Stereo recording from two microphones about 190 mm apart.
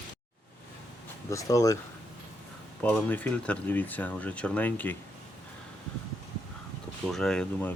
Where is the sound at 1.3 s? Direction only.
15° left (ahead or behind).